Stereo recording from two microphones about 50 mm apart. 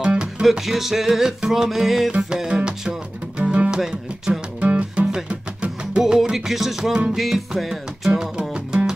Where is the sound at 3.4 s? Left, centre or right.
Right.